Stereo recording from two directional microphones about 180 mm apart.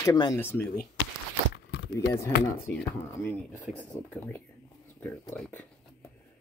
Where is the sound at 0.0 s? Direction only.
20° left (ahead or behind).